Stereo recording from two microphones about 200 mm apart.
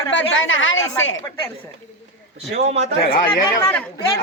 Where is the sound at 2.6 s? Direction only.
30° right (ahead or behind).